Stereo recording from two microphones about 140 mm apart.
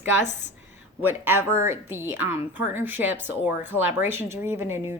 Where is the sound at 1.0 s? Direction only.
15° right (ahead or behind).